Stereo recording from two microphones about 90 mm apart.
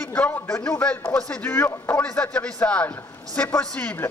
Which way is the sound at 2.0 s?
10° left (ahead or behind).